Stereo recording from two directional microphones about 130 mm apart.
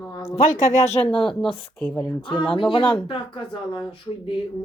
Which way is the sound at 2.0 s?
35° left (ahead or behind).